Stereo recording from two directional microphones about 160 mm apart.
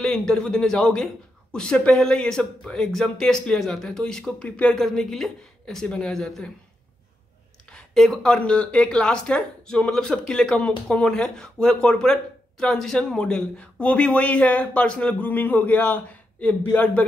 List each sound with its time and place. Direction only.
0.0 s a man's voice: 5° left (ahead or behind)
7.7 s speech: 5° left (ahead or behind)